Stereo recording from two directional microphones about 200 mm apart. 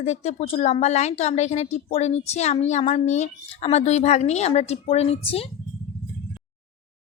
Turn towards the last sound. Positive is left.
turn(degrees=30)  # may be behind; listen again after turning